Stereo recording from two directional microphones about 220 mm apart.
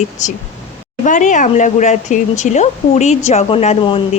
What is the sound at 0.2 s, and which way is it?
Speech, 35° left (ahead or behind).